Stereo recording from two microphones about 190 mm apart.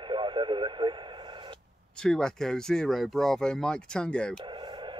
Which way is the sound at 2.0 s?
5° left (ahead or behind).